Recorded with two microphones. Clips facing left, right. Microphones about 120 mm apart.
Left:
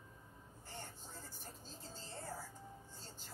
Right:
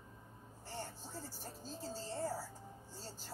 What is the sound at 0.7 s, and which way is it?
Music, 35° right (ahead or behind).